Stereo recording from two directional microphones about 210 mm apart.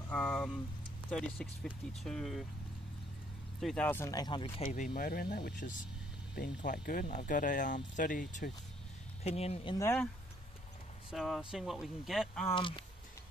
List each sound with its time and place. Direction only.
0.1 s speech: 5° left (ahead or behind)
3.6 s speech: 5° left (ahead or behind); by 4.6 s 25° left (ahead or behind)
4.6 s speech: 40° left (ahead or behind)
9.8 s speech: 10° left (ahead or behind)
11.1 s speech: centre (ahead or behind)
12.5 s speech: 25° left (ahead or behind)